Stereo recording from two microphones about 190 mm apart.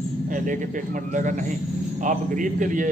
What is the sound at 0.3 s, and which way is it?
A man's voice, 45° right (ahead or behind).